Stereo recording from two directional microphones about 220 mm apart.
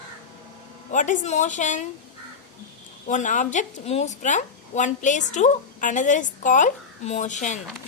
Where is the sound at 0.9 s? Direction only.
35° left (ahead or behind).